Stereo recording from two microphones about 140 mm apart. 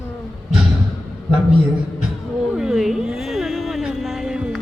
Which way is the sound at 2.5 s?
5° right (ahead or behind).